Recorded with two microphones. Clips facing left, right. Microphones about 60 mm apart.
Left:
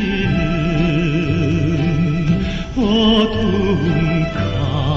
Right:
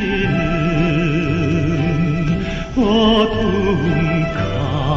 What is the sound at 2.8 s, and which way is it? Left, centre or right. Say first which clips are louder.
Music: even; centre.